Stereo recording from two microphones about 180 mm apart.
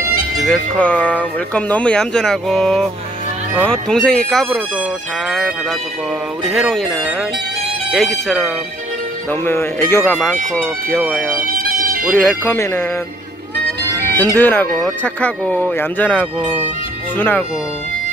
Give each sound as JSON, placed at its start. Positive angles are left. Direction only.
{"t": 0.5, "sound": "speech", "side_deg": 5}
{"t": 9.3, "sound": "speech", "side_deg": 10}
{"t": 11.5, "sound": "music", "side_deg": -50}
{"t": 12.2, "sound": "speech", "side_deg": 10}
{"t": 14.1, "sound": "speech", "side_deg": 10}